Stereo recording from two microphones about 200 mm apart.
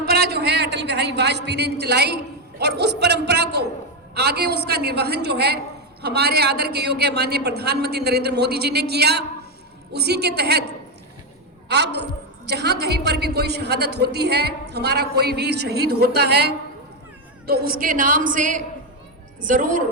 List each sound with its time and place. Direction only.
0.0 s a woman's voice: 50° right (ahead or behind)